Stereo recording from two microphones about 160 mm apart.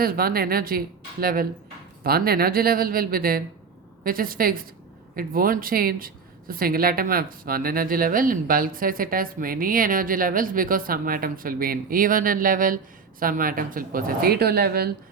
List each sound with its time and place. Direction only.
0.0 s speech: 65° right (ahead or behind)